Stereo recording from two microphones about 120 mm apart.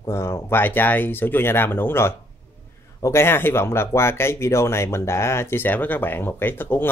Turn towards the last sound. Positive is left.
turn(degrees=15)  # may be behind; listen again after turning